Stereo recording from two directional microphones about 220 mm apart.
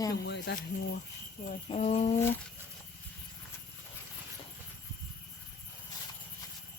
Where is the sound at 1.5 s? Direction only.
30° left (ahead or behind).